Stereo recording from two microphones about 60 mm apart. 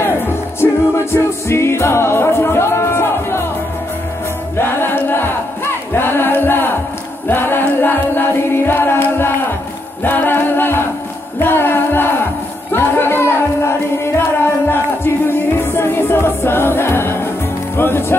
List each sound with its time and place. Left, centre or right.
0.6 s music: left
4.6 s music: left
7.2 s choir: left
10.0 s a capella: left
11.4 s music: left
15.6 s music: left